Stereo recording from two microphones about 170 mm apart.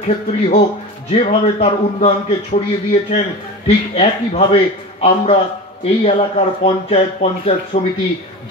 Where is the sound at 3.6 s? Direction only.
40° left (ahead or behind).